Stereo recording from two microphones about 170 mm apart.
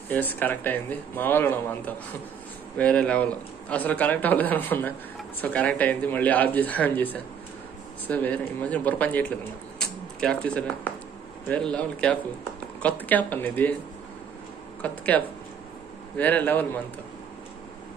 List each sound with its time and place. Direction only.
0.1 s speech: 10° left (ahead or behind)
9.8 s a sound: 5° left (ahead or behind)
11.4 s speech: 5° left (ahead or behind)
14.8 s speech: 10° left (ahead or behind)